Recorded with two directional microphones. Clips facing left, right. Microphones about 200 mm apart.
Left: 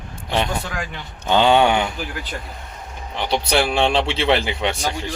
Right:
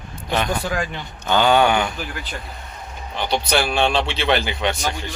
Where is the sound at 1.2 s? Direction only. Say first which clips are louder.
Left 1 dB; 25° left (ahead or behind).